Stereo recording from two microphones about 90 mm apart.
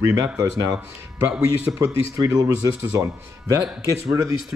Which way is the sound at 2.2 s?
35° right (ahead or behind).